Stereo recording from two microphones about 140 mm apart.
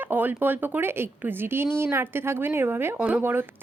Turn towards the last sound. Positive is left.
turn(degrees=-15)  # may be behind; listen again after turning